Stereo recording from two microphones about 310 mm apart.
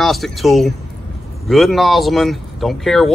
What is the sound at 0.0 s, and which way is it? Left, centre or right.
Speech, centre.